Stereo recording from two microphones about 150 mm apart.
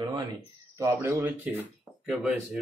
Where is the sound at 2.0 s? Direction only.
Centre (ahead or behind).